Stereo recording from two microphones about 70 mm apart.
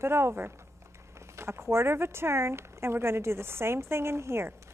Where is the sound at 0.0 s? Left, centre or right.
Right.